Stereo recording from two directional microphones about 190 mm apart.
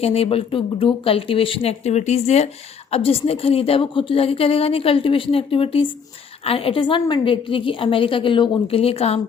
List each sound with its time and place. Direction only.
0.0 s a woman's voice: 30° left (ahead or behind)